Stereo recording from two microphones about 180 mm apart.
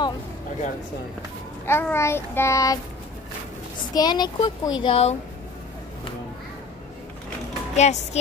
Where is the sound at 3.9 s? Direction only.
20° left (ahead or behind).